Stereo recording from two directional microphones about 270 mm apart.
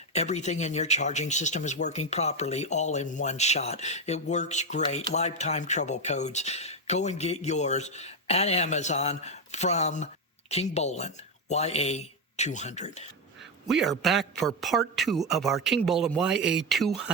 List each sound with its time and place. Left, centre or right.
0.1 s speech: left
13.7 s a man's voice: centre